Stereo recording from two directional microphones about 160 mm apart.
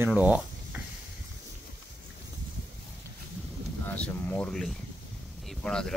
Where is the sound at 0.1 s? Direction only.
10° right (ahead or behind).